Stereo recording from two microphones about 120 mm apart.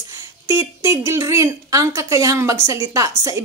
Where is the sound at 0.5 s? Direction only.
25° right (ahead or behind).